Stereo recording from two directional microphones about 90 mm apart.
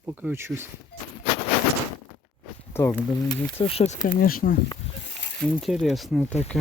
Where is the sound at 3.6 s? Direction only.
90° left.